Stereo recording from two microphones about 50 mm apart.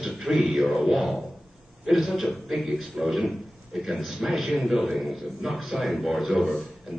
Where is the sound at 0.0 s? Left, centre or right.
Centre.